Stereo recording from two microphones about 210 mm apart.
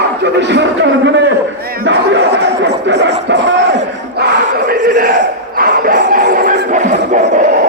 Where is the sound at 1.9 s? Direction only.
55° right (ahead or behind).